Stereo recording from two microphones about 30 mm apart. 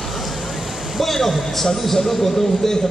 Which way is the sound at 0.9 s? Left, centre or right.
Centre.